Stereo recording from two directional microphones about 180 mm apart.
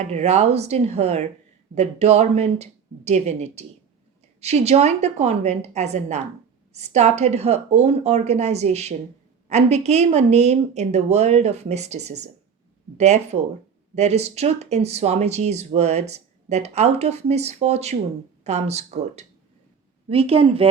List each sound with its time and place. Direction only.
0.1 s speech: 35° right (ahead or behind)